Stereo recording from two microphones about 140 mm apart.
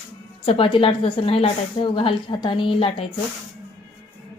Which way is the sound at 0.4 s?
40° left (ahead or behind).